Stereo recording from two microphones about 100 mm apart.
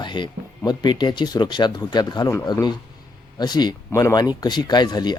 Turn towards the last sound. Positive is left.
turn(degrees=45)  # may be behind; listen again after turning